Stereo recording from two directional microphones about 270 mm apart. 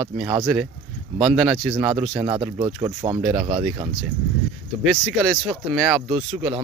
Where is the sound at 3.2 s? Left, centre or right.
Centre.